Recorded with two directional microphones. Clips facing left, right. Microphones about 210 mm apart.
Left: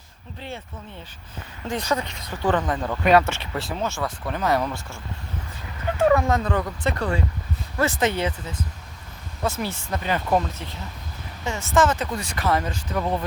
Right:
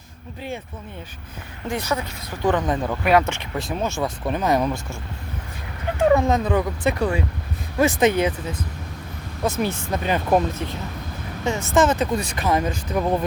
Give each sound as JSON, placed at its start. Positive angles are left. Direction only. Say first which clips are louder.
{"t": 1.6, "sound": "speech", "louder": "even", "side_deg": -10}
{"t": 6.0, "sound": "speech", "louder": "right 2 dB", "side_deg": -20}